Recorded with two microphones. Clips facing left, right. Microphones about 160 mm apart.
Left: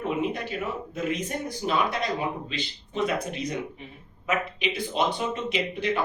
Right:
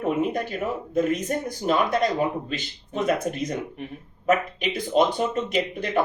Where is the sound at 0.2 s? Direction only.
45° right (ahead or behind).